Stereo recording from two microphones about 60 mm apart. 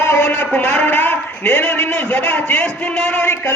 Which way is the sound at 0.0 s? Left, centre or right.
Left.